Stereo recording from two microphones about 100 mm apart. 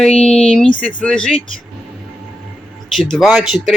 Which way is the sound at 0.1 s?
90° left.